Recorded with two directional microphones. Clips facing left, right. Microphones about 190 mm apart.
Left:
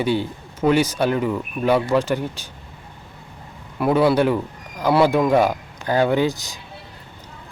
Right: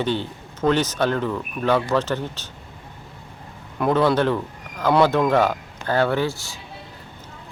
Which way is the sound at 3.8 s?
10° left (ahead or behind).